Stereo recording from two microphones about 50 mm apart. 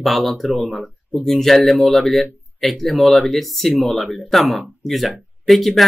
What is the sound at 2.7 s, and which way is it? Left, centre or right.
Speech, centre.